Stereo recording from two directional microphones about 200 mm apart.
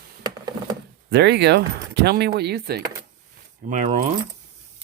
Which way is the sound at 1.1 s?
60° right (ahead or behind).